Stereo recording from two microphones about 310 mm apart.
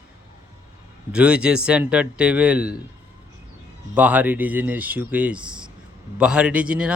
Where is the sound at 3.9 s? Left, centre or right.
Centre.